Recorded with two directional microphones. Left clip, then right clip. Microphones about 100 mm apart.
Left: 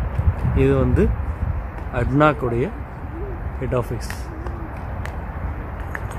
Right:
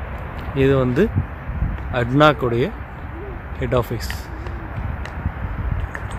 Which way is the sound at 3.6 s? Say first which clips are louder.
Right 3 dB; 55° right (ahead or behind).